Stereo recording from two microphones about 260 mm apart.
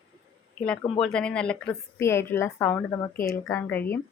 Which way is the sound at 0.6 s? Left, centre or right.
Centre.